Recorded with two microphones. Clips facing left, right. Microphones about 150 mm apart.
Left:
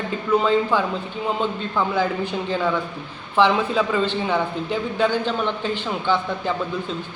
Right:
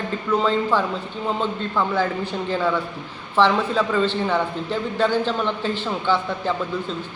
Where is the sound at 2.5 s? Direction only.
Centre (ahead or behind).